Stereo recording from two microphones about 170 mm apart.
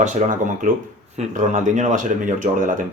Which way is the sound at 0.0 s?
45° right (ahead or behind).